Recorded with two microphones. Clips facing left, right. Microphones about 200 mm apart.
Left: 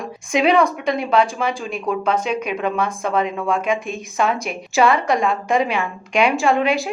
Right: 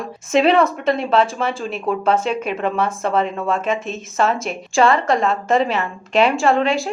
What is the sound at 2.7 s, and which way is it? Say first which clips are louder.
Speech: right 1 dB; 5° right (ahead or behind).